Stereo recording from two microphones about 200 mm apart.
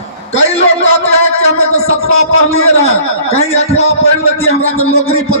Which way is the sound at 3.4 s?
30° left (ahead or behind).